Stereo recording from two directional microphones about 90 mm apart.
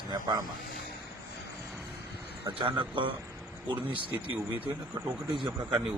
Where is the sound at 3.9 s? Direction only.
80° right.